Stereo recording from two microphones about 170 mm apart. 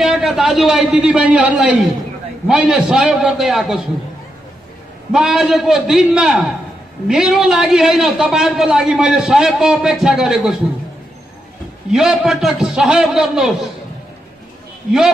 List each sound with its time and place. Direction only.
0.0 s a man's voice: centre (ahead or behind)
5.1 s a man's voice: 5° right (ahead or behind)
11.9 s a man's voice: centre (ahead or behind)